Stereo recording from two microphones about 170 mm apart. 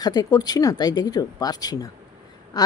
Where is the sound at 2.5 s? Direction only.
25° left (ahead or behind).